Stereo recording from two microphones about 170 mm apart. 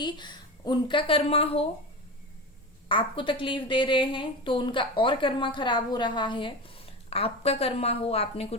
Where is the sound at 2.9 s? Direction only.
30° left (ahead or behind).